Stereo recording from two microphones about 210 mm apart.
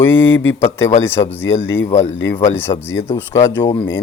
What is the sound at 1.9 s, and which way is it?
Speech, 35° left (ahead or behind).